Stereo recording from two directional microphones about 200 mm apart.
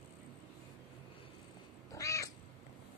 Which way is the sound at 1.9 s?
15° left (ahead or behind).